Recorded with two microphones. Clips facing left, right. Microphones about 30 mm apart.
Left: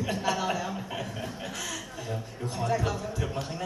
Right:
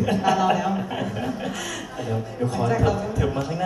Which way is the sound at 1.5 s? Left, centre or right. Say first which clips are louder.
Right 6 dB; right.